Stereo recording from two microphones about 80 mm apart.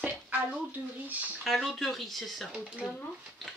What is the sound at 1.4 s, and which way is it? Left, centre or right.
Speech, centre.